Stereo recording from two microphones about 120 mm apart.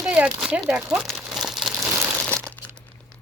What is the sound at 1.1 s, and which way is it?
Crumpling, centre (ahead or behind).